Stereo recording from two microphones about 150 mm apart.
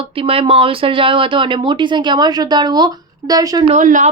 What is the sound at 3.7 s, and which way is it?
Speech, 60° right (ahead or behind).